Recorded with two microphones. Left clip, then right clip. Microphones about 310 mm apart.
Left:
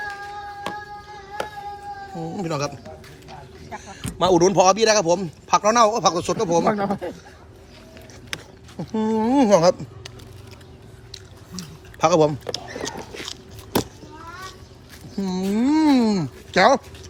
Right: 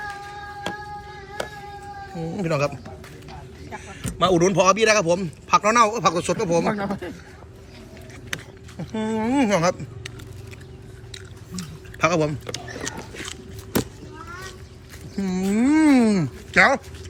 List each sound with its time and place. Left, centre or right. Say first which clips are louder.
2.3 s a man's voice: right 3 dB; centre
3.7 s a sound: left 1 dB; left
4.2 s a man's voice: left 2 dB; centre
6.7 s speech: left 4 dB; left
8.3 s a sound: right 1 dB; centre
8.9 s a man's voice: left 3 dB; centre
11.1 s chewing: even; centre
15.2 s a man's voice: even; centre